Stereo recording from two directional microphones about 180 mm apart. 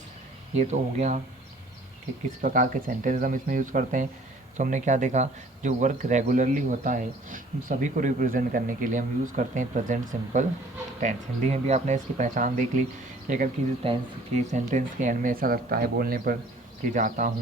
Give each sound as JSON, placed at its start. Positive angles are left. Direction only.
{"t": 0.5, "sound": "speech", "side_deg": -40}
{"t": 2.4, "sound": "speech", "side_deg": -45}
{"t": 16.9, "sound": "speech", "side_deg": -45}